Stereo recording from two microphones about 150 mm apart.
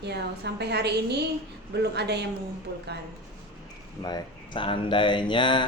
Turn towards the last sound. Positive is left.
turn(degrees=35)  # may be behind; listen again after turning